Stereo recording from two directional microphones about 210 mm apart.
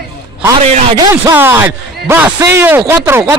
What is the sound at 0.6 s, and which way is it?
Speech, 30° right (ahead or behind).